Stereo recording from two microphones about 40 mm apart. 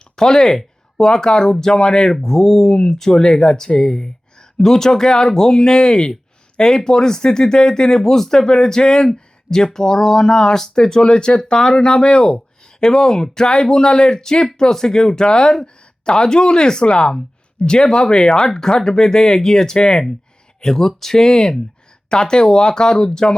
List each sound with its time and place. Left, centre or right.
0.2 s speech: centre